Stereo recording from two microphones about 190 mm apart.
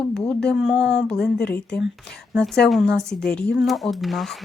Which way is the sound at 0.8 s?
70° left (ahead or behind).